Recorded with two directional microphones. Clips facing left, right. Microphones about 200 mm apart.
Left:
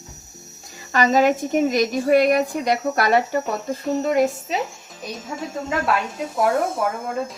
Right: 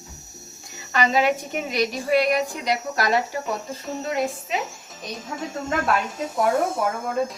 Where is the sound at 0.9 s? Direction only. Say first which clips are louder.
Left 4 dB; 45° left (ahead or behind).